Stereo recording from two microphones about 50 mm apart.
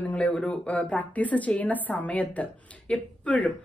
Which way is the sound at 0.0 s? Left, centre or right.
Left.